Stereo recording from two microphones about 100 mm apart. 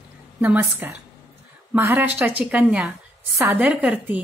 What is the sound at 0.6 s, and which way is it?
A woman's voice, 20° right (ahead or behind).